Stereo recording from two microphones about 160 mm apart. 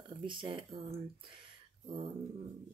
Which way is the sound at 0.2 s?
30° right (ahead or behind).